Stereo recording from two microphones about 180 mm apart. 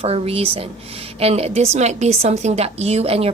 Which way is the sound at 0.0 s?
35° right (ahead or behind).